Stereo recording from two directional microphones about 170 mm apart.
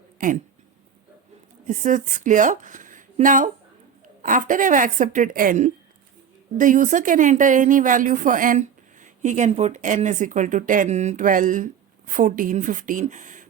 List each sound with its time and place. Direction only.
0.2 s speech: 50° right (ahead or behind)
1.6 s speech: 50° right (ahead or behind)